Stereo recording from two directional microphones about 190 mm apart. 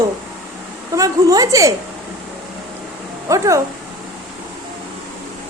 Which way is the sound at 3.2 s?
15° right (ahead or behind).